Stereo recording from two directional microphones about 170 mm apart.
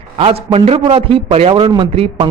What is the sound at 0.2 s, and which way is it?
A man's voice, 35° right (ahead or behind).